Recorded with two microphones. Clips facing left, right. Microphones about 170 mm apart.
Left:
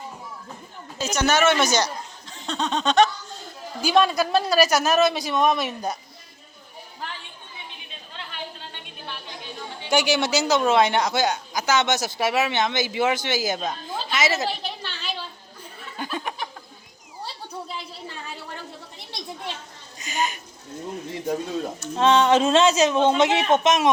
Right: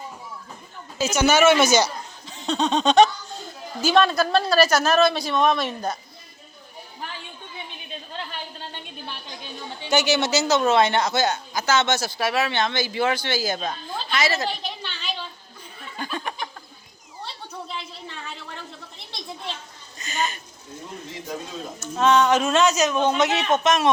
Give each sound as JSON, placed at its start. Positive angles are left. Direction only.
{"t": 0.9, "sound": "speech", "side_deg": -5}
{"t": 3.8, "sound": "speech", "side_deg": 10}
{"t": 9.9, "sound": "speech", "side_deg": 10}
{"t": 10.6, "sound": "speech", "side_deg": 0}
{"t": 10.8, "sound": "speech", "side_deg": 10}
{"t": 13.6, "sound": "a woman's voice", "side_deg": 5}
{"t": 14.1, "sound": "a woman's voice", "side_deg": 20}
{"t": 14.4, "sound": "a sound", "side_deg": 5}
{"t": 20.0, "sound": "speech", "side_deg": 10}
{"t": 21.8, "sound": "speech", "side_deg": 25}